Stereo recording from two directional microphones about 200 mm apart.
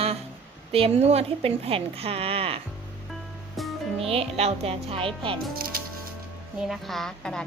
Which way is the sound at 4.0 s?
30° right (ahead or behind).